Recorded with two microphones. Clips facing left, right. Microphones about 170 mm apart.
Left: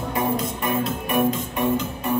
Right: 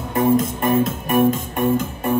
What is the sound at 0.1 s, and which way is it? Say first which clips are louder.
Music: right 8 dB; 50° right (ahead or behind).